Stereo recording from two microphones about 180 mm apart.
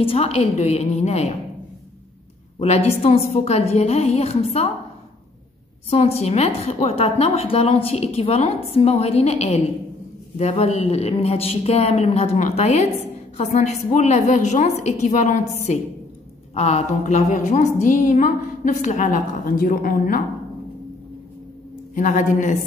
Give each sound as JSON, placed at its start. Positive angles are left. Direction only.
{"t": 0.0, "sound": "a woman's voice", "side_deg": 30}
{"t": 2.6, "sound": "a woman's voice", "side_deg": 35}
{"t": 5.9, "sound": "a woman's voice", "side_deg": 35}
{"t": 13.9, "sound": "a woman's voice", "side_deg": 40}
{"t": 21.9, "sound": "a woman's voice", "side_deg": 45}